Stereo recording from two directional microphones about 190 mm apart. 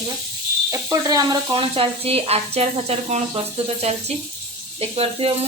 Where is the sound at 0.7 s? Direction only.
20° right (ahead or behind).